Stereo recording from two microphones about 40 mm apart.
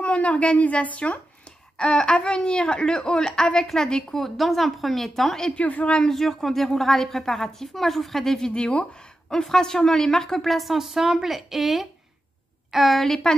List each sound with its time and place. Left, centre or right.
0.0 s a woman's voice: left; by 4.2 s centre
4.2 s a woman's voice: centre
5.6 s a woman's voice: left
5.9 s a woman's voice: centre
8.9 s a sound: left
9.4 s a woman's voice: centre
10.5 s a woman's voice: centre
13.0 s a woman's voice: centre